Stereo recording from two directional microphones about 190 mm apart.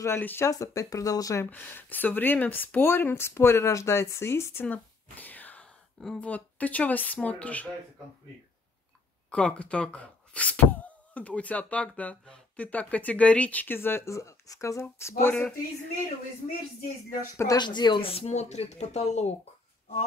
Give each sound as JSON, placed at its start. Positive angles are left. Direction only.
{"t": 0.0, "sound": "speech", "side_deg": 10}
{"t": 9.3, "sound": "speech", "side_deg": 5}
{"t": 17.4, "sound": "speech", "side_deg": 20}